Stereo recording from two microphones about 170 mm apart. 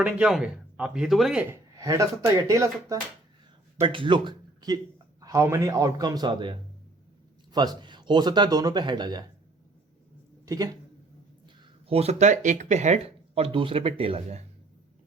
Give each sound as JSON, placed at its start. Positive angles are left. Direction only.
{"t": 0.0, "sound": "speech", "side_deg": -5}
{"t": 1.7, "sound": "a sound", "side_deg": -20}
{"t": 2.5, "sound": "speech", "side_deg": -20}
{"t": 3.8, "sound": "speech", "side_deg": -30}
{"t": 10.4, "sound": "speech", "side_deg": -20}
{"t": 11.4, "sound": "speech", "side_deg": -35}